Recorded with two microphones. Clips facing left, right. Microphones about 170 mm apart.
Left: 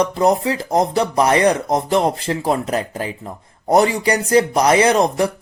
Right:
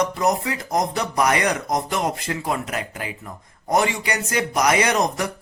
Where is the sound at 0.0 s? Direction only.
30° left (ahead or behind).